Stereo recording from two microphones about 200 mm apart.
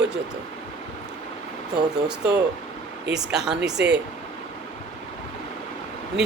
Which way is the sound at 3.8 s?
55° right (ahead or behind).